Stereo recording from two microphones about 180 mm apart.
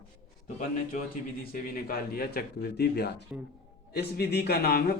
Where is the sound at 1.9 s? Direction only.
55° left (ahead or behind).